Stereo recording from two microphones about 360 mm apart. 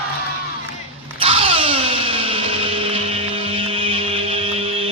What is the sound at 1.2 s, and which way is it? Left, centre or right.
Music, centre.